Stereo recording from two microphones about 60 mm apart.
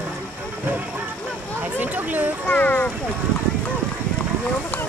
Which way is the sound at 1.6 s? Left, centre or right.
Right.